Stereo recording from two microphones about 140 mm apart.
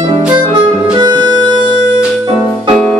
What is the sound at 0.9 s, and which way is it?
Music, 35° right (ahead or behind).